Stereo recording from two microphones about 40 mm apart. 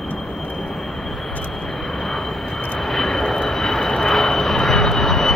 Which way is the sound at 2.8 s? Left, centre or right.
Centre.